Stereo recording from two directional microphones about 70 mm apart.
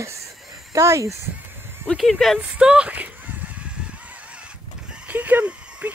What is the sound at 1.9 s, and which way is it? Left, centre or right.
Speech, centre.